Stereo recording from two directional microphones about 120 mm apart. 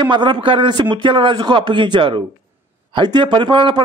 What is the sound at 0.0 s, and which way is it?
A man's voice, 40° right (ahead or behind).